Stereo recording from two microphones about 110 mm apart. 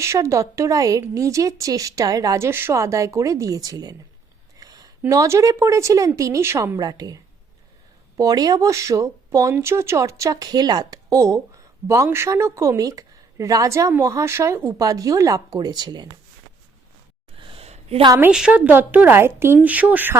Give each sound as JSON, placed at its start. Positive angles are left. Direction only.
{"t": 0.0, "sound": "a woman's voice", "side_deg": -25}
{"t": 6.7, "sound": "speech", "side_deg": -35}
{"t": 14.8, "sound": "speech", "side_deg": -35}
{"t": 17.3, "sound": "a sound", "side_deg": -55}
{"t": 18.3, "sound": "a woman's voice", "side_deg": -10}